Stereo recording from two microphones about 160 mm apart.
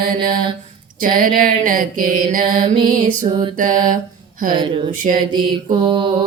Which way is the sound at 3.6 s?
55° right (ahead or behind).